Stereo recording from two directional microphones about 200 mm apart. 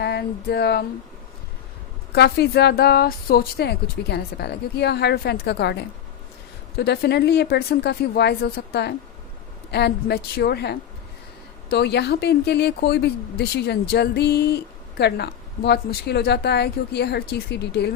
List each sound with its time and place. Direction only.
0.0 s speech: 55° left (ahead or behind)
2.1 s a woman's voice: 55° left (ahead or behind)